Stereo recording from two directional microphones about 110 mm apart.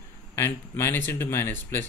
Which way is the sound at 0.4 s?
25° left (ahead or behind).